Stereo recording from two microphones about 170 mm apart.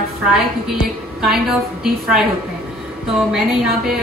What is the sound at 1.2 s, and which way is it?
A woman's voice, centre (ahead or behind).